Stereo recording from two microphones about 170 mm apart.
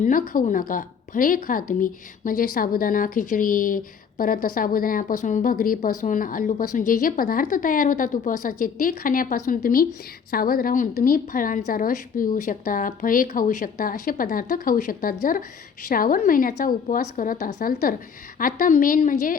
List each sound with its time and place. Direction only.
0.0 s a woman's voice: 55° left (ahead or behind)